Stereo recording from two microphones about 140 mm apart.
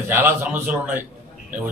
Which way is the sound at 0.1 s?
15° right (ahead or behind).